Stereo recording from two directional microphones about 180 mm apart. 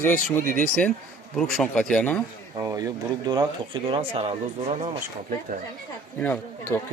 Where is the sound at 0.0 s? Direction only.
10° left (ahead or behind).